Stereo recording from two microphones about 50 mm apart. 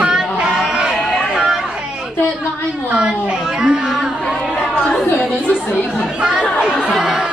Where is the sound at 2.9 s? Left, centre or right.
Centre.